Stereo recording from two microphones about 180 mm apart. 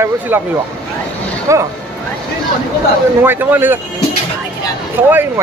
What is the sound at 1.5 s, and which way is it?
Speech, 15° right (ahead or behind).